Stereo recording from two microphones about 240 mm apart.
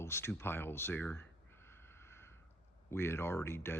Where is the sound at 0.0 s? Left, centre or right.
Centre.